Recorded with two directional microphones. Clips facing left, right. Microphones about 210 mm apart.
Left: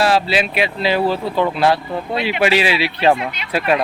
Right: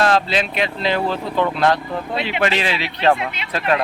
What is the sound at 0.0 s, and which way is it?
Speech, 5° left (ahead or behind).